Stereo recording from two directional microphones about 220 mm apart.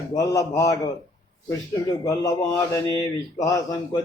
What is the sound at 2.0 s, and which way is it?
Speech, 15° left (ahead or behind).